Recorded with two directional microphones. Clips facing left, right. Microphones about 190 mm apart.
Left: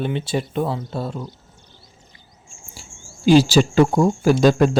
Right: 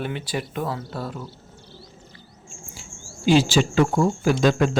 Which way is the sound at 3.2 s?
40° left (ahead or behind).